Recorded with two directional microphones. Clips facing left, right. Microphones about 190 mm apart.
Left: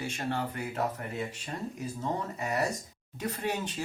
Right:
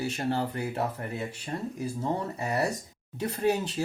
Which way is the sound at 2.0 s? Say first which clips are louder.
Right 2 dB; 30° right (ahead or behind).